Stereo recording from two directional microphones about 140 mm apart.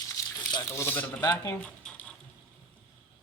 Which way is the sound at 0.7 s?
15° left (ahead or behind).